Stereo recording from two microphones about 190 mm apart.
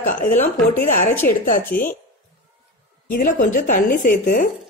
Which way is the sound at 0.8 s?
45° left (ahead or behind).